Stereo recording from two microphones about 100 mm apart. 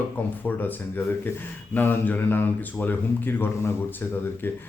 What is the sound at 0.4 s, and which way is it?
Speech, 20° left (ahead or behind).